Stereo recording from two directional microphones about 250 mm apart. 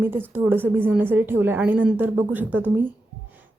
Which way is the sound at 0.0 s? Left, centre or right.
Centre.